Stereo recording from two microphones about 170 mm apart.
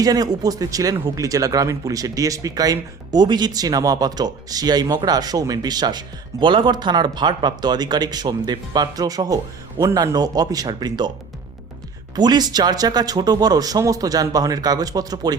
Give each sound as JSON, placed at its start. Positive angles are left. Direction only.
{"t": 0.0, "sound": "speech", "side_deg": -20}
{"t": 12.1, "sound": "speech", "side_deg": -25}